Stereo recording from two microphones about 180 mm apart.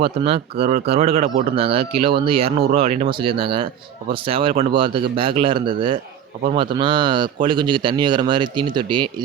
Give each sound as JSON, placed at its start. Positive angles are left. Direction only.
{"t": 0.2, "sound": "speech", "side_deg": -30}